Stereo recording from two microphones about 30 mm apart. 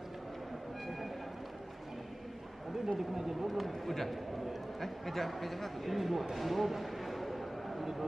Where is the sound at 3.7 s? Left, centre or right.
Centre.